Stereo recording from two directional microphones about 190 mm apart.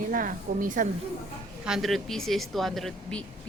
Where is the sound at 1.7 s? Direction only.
Centre (ahead or behind).